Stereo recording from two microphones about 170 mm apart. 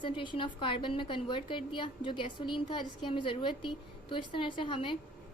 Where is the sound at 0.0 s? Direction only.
30° left (ahead or behind).